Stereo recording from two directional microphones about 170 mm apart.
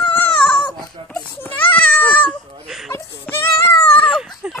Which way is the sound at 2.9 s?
15° left (ahead or behind).